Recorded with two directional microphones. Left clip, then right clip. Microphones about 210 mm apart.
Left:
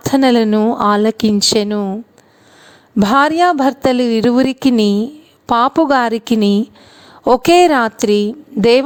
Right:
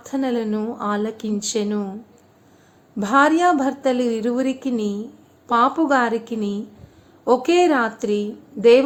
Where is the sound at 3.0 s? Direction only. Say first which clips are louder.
Left 5 dB; 45° left (ahead or behind).